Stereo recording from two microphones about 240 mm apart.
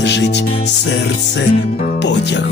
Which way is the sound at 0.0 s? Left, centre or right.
Left.